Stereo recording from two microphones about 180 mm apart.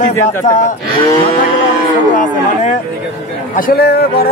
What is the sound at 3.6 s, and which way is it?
Speech, 60° left (ahead or behind).